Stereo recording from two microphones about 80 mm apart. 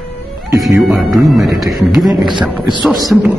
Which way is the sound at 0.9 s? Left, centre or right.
Centre.